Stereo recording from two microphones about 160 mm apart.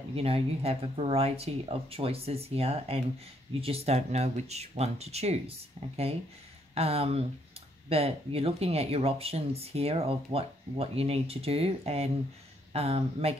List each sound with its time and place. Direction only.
0.1 s speech: 35° right (ahead or behind)